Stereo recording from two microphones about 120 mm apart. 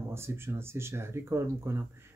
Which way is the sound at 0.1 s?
20° right (ahead or behind).